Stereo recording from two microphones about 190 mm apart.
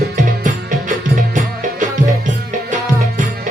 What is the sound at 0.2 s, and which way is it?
Music, 40° right (ahead or behind).